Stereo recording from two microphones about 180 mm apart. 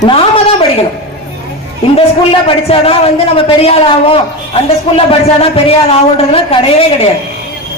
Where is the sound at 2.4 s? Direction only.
30° left (ahead or behind).